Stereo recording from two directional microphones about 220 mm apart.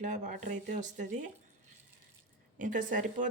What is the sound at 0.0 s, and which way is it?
Speech, 35° right (ahead or behind).